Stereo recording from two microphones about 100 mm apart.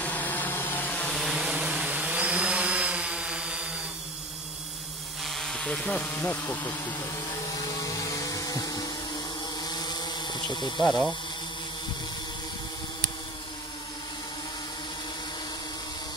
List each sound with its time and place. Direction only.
0.0 s vehicle: 15° left (ahead or behind)
1.2 s a sound: 5° right (ahead or behind)
5.2 s speech: 5° left (ahead or behind); by 6.7 s 25° left (ahead or behind)
6.9 s vacuum cleaner: 40° left (ahead or behind)
9.6 s motorboat: 45° left (ahead or behind)
10.8 s speech: centre (ahead or behind)